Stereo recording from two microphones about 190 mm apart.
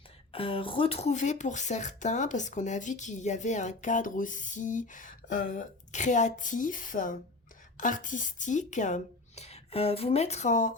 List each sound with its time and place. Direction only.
0.3 s speech: 30° left (ahead or behind)